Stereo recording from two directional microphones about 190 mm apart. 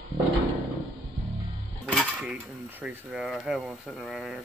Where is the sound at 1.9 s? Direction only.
5° right (ahead or behind).